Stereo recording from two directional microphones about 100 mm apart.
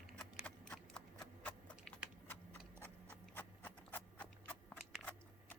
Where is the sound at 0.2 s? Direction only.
10° left (ahead or behind).